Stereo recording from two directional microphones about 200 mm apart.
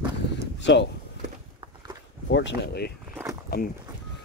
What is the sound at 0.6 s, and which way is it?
Speech, 60° left (ahead or behind).